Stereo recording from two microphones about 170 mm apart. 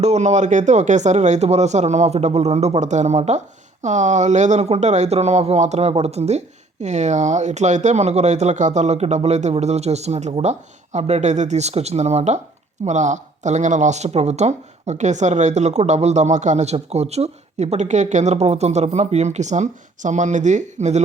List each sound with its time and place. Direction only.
0.0 s speech: 40° right (ahead or behind)